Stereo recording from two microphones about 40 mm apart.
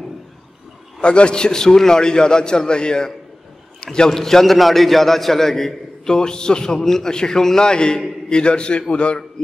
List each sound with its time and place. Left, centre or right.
1.0 s a man's voice: left